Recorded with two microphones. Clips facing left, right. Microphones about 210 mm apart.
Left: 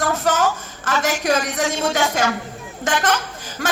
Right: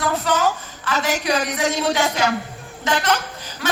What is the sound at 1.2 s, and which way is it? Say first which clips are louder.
A woman's voice: left 1 dB; 45° left (ahead or behind).